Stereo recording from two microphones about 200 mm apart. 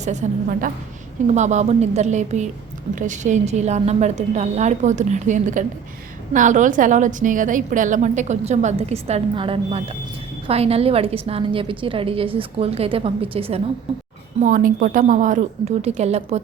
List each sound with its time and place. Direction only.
0.0 s a woman's voice: 35° right (ahead or behind)
14.3 s a woman's voice: 40° right (ahead or behind)